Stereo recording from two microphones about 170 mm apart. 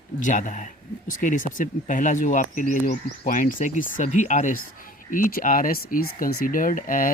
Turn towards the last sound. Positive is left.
turn(degrees=50)  # may be behind; listen again after turning